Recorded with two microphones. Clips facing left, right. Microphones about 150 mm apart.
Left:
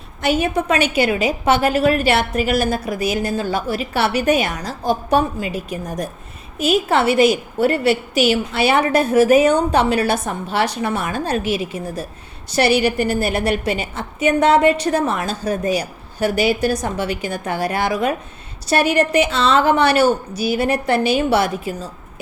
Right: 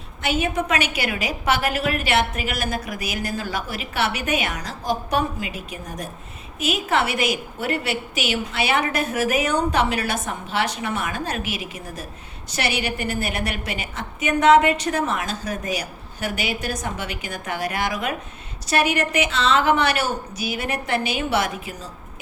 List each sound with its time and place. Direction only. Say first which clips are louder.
0.2 s a woman's voice: left 5 dB; 35° left (ahead or behind)